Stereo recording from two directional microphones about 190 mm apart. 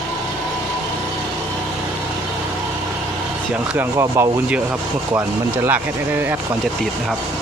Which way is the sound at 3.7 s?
15° right (ahead or behind).